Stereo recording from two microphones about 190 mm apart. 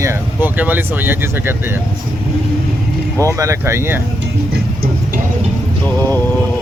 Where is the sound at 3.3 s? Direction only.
15° right (ahead or behind).